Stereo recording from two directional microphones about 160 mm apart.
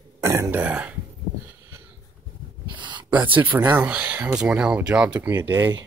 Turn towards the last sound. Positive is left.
turn(degrees=-15)  # may be behind; listen again after turning